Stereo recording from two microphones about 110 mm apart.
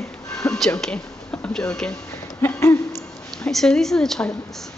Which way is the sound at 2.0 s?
25° left (ahead or behind).